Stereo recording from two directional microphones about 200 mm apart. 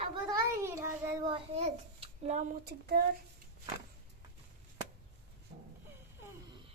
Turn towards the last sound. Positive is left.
turn(degrees=-35)  # may be behind; listen again after turning